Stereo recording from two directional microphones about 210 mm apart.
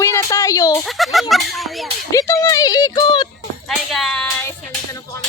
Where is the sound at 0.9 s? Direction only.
Centre (ahead or behind).